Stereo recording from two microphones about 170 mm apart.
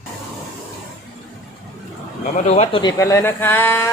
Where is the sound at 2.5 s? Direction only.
40° left (ahead or behind).